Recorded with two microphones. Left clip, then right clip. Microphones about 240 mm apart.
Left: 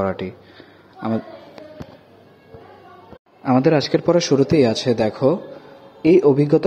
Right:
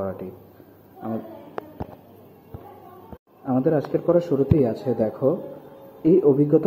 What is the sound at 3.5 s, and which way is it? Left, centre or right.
A man's voice, left.